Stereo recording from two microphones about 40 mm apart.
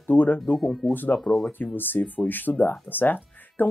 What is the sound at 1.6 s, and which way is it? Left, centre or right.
Speech, left.